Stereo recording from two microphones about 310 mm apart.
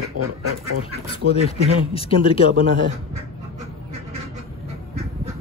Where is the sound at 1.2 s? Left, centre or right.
Right.